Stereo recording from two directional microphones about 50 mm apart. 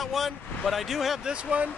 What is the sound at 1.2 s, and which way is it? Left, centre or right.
Speech, right.